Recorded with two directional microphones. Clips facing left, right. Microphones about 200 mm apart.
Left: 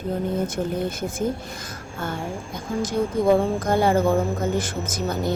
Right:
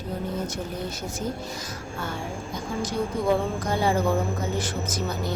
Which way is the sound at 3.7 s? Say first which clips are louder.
Left 6 dB; 50° left (ahead or behind).